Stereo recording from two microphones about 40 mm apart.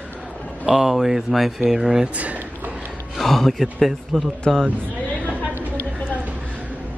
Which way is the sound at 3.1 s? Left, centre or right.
Centre.